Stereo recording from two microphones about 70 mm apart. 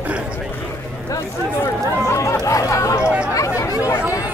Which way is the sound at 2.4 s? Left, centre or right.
Left.